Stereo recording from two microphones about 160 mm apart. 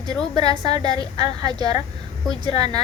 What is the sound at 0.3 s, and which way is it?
A woman's voice, 25° right (ahead or behind).